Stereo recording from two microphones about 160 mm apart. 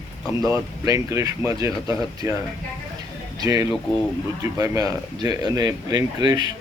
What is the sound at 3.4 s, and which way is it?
Speech, 25° right (ahead or behind).